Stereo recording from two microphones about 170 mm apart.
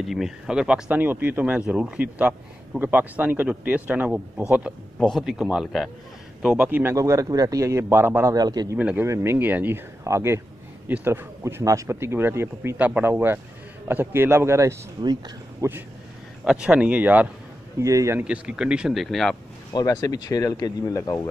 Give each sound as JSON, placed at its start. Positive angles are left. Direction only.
{"t": 0.0, "sound": "speech", "side_deg": 0}
{"t": 8.7, "sound": "speech", "side_deg": -10}
{"t": 16.4, "sound": "speech", "side_deg": -5}
{"t": 18.2, "sound": "speech", "side_deg": -5}
{"t": 19.7, "sound": "speech", "side_deg": 20}